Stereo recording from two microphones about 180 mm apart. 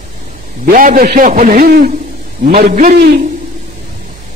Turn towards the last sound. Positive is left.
turn(degrees=-50)  # may be behind; listen again after turning